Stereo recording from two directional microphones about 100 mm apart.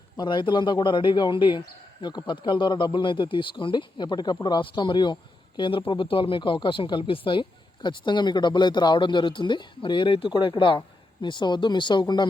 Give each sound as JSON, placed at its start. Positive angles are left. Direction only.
{"t": 0.2, "sound": "speech", "side_deg": 50}